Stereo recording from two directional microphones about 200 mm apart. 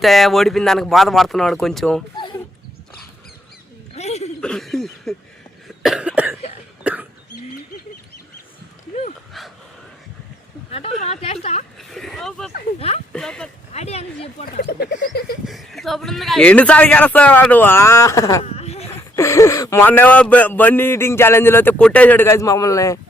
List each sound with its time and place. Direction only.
0.0 s speech: centre (ahead or behind)
3.9 s a sound: 35° left (ahead or behind)
4.4 s a sound: 5° left (ahead or behind)
5.6 s cough: centre (ahead or behind)
10.7 s a sound: 30° left (ahead or behind)
11.8 s vehicle: centre (ahead or behind)
13.1 s speech: 5° left (ahead or behind)
13.7 s speech: 30° left (ahead or behind)
14.4 s speech: 50° left (ahead or behind)
15.4 s speech: centre (ahead or behind); by 18.4 s 15° left (ahead or behind)
18.4 s a sound: 30° left (ahead or behind)
19.1 s speech: 15° left (ahead or behind)